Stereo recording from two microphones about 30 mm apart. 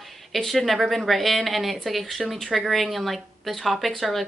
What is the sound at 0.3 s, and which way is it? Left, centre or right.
A woman's voice, centre.